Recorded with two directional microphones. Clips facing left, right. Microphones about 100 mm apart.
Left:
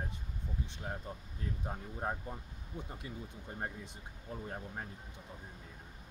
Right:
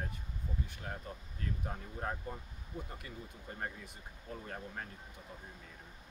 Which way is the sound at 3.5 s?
20° left (ahead or behind).